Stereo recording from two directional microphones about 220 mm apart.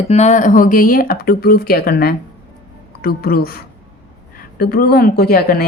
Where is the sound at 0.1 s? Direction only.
30° left (ahead or behind).